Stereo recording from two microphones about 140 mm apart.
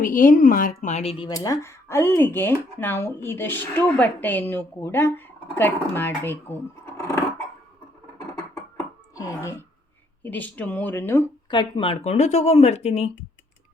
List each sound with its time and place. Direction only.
0.0 s a woman's voice: 75° left (ahead or behind); by 1.1 s 55° left (ahead or behind)
1.3 s speech: 25° left (ahead or behind)
9.1 s speech: 25° left (ahead or behind)
10.2 s speech: 10° left (ahead or behind)
11.5 s speech: 35° left (ahead or behind)